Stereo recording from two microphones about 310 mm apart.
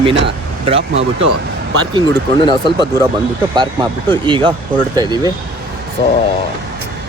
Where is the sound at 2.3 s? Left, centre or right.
Centre.